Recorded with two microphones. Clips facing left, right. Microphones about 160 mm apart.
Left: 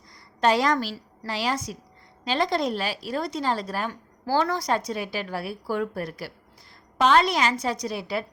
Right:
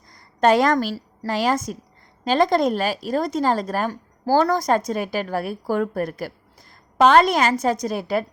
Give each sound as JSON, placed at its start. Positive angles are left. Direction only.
{"t": 0.3, "sound": "a woman's voice", "side_deg": -50}